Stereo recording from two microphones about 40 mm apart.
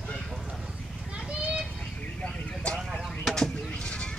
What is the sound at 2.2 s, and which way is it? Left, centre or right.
Speech, left.